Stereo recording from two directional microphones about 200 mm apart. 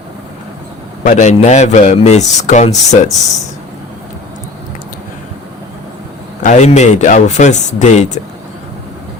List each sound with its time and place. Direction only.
1.0 s speech: 35° left (ahead or behind)
6.4 s speech: 35° left (ahead or behind)